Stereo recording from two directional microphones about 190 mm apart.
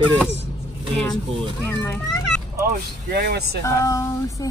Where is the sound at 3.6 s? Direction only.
15° left (ahead or behind).